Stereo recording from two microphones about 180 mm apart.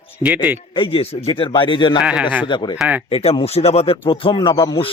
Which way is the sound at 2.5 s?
25° left (ahead or behind).